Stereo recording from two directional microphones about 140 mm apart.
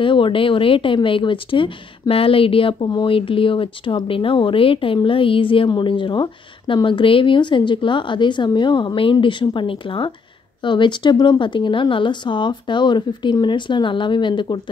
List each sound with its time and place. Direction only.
0.0 s speech: 35° left (ahead or behind)